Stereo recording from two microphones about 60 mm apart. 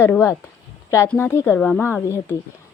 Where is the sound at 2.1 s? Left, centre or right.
Left.